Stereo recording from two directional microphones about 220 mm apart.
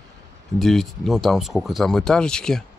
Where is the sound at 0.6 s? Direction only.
Centre (ahead or behind).